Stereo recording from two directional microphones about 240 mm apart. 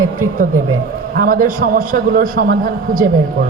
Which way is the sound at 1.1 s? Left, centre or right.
Right.